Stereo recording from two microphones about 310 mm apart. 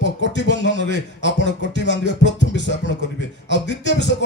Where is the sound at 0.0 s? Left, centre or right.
Left.